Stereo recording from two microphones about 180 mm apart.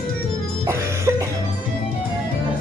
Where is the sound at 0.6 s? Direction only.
15° right (ahead or behind).